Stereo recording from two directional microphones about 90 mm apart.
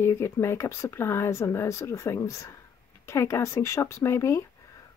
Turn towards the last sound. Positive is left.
turn(degrees=30)  # may be behind; listen again after turning